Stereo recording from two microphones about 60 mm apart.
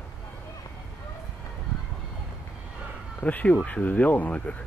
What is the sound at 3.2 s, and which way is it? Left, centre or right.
Speech, left.